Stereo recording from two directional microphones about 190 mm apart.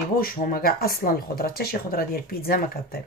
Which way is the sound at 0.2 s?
50° left (ahead or behind).